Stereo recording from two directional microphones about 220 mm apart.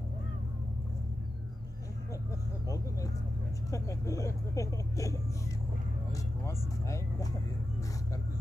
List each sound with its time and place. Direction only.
3.7 s speech: 15° left (ahead or behind)
6.4 s speech: 15° left (ahead or behind)